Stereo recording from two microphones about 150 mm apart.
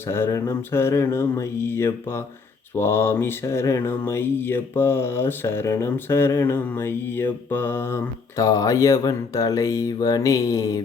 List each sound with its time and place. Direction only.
0.1 s mantra: 20° left (ahead or behind)